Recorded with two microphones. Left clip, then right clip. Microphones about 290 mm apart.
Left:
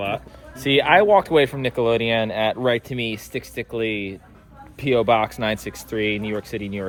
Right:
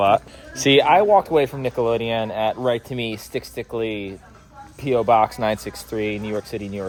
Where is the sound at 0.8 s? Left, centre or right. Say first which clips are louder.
Left 1 dB; centre.